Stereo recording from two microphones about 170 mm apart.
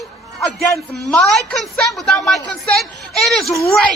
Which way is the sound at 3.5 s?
15° left (ahead or behind).